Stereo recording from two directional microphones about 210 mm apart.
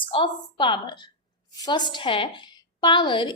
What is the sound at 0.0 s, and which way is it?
A woman's voice, 25° left (ahead or behind).